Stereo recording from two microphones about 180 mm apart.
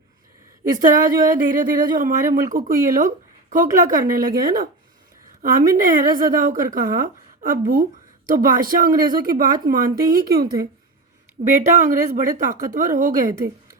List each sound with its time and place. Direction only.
0.8 s speech: 45° right (ahead or behind)
11.6 s speech: 45° right (ahead or behind)